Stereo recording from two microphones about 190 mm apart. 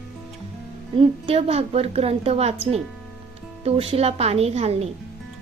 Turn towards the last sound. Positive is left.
turn(degrees=-35)  # may be behind; listen again after turning